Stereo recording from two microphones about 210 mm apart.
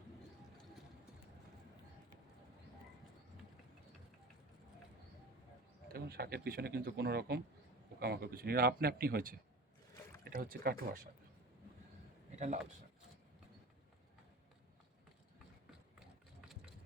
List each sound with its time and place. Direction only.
5.9 s speech: 45° right (ahead or behind)